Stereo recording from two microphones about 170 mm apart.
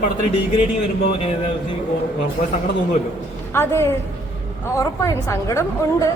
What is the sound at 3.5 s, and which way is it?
A woman's voice, 15° left (ahead or behind).